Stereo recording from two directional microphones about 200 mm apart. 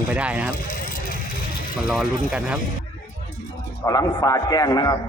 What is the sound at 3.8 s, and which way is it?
A man's voice, 15° left (ahead or behind).